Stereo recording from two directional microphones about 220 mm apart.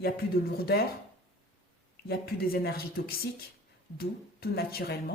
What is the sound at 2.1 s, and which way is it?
Speech, 45° left (ahead or behind).